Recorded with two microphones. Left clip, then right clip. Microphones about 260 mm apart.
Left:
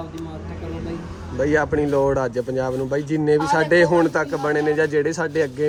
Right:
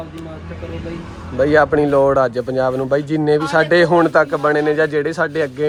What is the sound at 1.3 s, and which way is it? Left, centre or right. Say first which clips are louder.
A man's voice: right 6 dB; centre.